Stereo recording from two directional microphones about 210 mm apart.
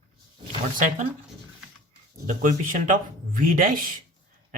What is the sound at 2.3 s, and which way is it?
Speech, 40° right (ahead or behind).